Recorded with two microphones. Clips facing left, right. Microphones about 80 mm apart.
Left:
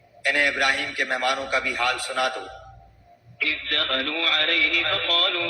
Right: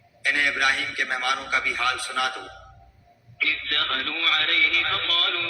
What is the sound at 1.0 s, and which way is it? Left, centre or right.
A man's voice, left.